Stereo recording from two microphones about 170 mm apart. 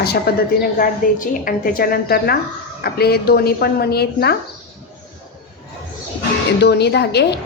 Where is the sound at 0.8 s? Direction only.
55° left (ahead or behind).